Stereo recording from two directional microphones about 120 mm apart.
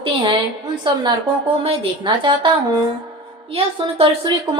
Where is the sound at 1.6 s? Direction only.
45° right (ahead or behind).